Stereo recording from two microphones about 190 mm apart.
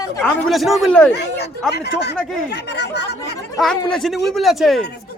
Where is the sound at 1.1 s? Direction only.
65° left (ahead or behind).